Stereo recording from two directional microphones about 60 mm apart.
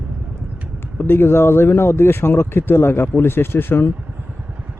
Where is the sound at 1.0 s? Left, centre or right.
Left.